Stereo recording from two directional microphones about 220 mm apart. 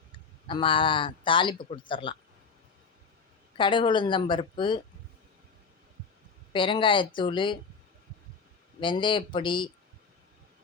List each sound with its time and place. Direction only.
0.4 s a man's voice: 20° left (ahead or behind)
3.6 s a man's voice: 20° left (ahead or behind)
6.5 s a man's voice: 20° left (ahead or behind)
8.8 s a man's voice: 20° left (ahead or behind)